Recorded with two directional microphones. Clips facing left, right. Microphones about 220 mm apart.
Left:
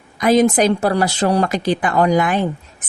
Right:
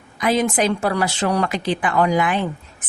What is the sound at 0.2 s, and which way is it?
A woman's voice, 40° left (ahead or behind).